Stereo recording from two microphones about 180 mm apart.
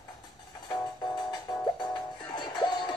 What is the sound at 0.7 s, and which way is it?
Music, 25° left (ahead or behind).